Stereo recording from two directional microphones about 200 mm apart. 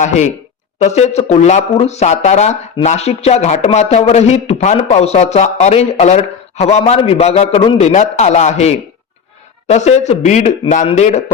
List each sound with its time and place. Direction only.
0.0 s speech: 35° left (ahead or behind)